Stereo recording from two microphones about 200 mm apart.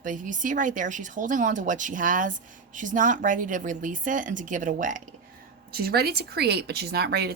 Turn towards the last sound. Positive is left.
turn(degrees=-55)  # may be behind; listen again after turning